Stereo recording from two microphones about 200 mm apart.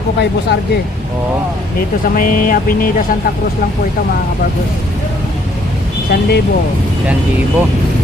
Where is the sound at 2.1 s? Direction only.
45° left (ahead or behind).